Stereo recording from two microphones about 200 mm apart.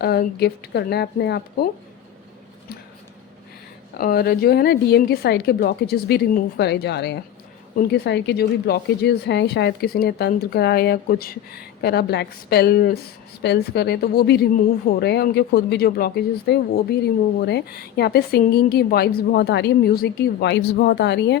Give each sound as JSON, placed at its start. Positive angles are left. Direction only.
{"t": 0.0, "sound": "speech", "side_deg": 50}
{"t": 3.9, "sound": "a woman's voice", "side_deg": 50}